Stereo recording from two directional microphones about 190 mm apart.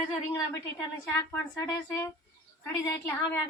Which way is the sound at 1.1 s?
15° left (ahead or behind).